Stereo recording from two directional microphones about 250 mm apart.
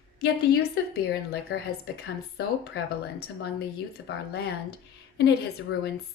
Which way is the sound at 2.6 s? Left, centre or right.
Left.